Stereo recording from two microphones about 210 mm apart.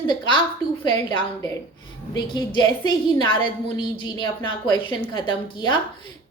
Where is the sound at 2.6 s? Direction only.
20° left (ahead or behind).